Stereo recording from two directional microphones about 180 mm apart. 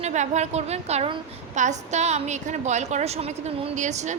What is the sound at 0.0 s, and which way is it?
A woman's voice, 40° right (ahead or behind).